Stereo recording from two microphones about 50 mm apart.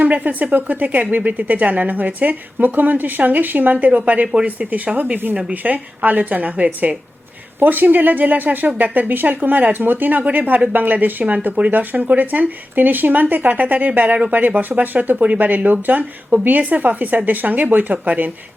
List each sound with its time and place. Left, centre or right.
0.0 s a woman's voice: right
5.3 s a woman's voice: right